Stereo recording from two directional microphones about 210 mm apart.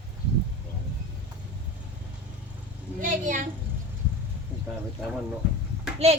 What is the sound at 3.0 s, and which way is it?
Speech, 40° right (ahead or behind).